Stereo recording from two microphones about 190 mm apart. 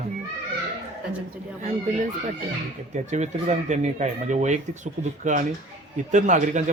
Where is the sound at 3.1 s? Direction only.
40° right (ahead or behind).